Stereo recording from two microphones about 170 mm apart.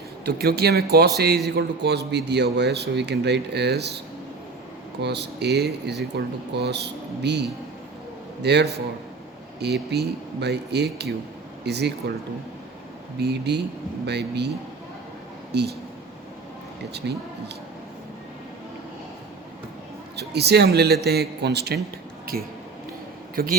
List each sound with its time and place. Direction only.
0.3 s a man's voice: 70° right (ahead or behind)
4.9 s a man's voice: 80° right
13.1 s a man's voice: 75° right (ahead or behind)
15.5 s a man's voice: 75° right (ahead or behind)
17.0 s a man's voice: 80° right
20.1 s a man's voice: 75° right (ahead or behind)
23.3 s a man's voice: 60° right (ahead or behind)